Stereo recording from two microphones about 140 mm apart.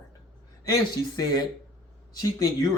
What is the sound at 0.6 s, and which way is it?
Speech, 25° left (ahead or behind).